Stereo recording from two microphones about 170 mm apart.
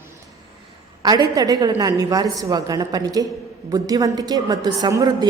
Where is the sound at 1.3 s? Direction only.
20° right (ahead or behind).